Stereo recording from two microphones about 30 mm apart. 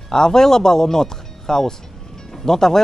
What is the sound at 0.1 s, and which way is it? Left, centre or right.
Speech, centre.